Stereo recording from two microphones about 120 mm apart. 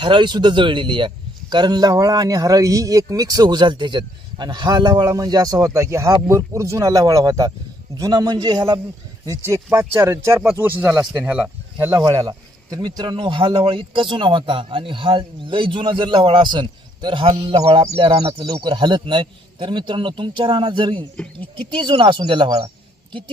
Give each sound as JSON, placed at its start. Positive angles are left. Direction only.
{"t": 0.0, "sound": "a man's voice", "side_deg": -40}
{"t": 11.1, "sound": "speech", "side_deg": -10}
{"t": 12.0, "sound": "a man's voice", "side_deg": -30}
{"t": 20.9, "sound": "speech", "side_deg": 10}
{"t": 21.6, "sound": "a man's voice", "side_deg": -45}